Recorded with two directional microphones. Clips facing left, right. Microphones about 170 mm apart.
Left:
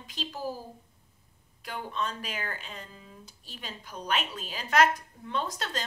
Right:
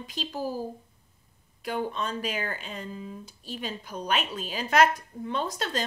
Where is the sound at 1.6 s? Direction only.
15° right (ahead or behind).